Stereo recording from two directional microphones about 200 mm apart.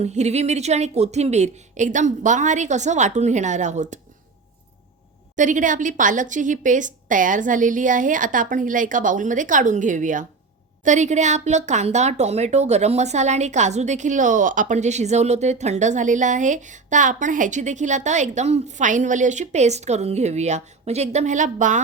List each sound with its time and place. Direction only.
0.0 s a woman's voice: 35° right (ahead or behind)
5.4 s a woman's voice: 40° right (ahead or behind)